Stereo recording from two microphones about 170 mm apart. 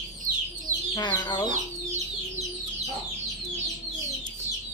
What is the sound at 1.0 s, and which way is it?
Speech, 25° left (ahead or behind).